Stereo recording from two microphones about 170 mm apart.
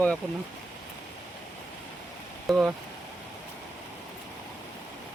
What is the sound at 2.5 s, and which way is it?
Speech, centre (ahead or behind).